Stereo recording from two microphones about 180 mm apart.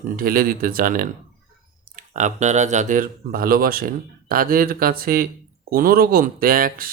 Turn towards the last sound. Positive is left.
turn(degrees=-55)  # may be behind; listen again after turning